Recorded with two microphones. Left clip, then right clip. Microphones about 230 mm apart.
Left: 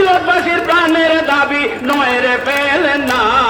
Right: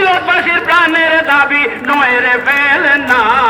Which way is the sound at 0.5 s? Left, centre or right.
Left.